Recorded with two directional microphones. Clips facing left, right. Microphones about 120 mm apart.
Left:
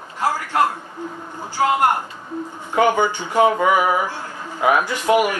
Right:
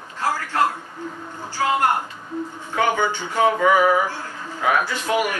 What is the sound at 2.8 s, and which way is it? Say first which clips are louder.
Speech: left 4 dB; 15° left (ahead or behind).